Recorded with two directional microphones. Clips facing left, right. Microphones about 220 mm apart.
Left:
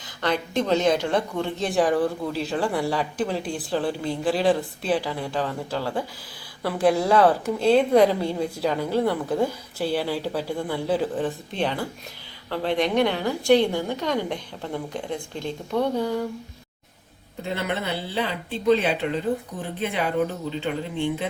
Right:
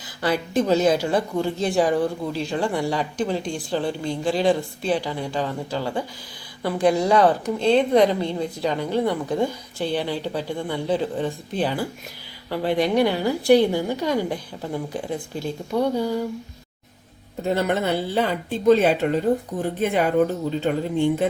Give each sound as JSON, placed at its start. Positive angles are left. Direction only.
{"t": 0.2, "sound": "a woman's voice", "side_deg": -5}
{"t": 17.4, "sound": "speech", "side_deg": -45}